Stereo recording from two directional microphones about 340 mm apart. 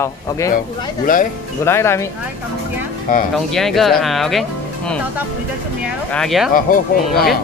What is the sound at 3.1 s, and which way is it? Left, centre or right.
Speech, left.